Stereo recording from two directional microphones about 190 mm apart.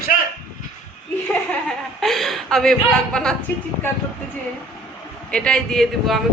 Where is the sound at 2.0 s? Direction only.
Centre (ahead or behind).